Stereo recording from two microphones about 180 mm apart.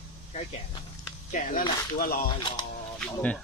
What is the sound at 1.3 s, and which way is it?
Speech, 45° left (ahead or behind).